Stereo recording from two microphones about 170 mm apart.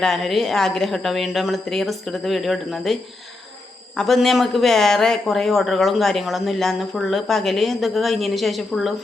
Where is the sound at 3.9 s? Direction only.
Centre (ahead or behind).